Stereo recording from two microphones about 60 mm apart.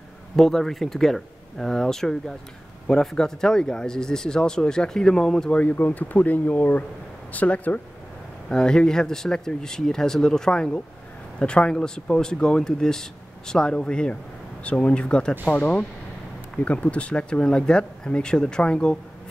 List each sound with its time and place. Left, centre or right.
0.4 s speech: centre
5.6 s speech: left
8.5 s speech: centre